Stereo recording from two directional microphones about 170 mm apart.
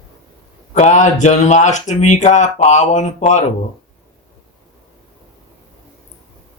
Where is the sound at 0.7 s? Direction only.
45° left (ahead or behind).